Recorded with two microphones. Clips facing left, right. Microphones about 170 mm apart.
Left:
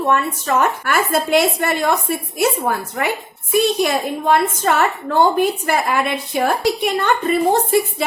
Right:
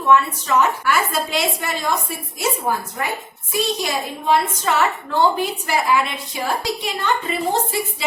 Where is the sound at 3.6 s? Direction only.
55° left (ahead or behind).